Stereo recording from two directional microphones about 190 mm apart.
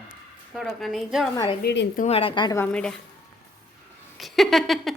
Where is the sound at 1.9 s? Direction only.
35° left (ahead or behind).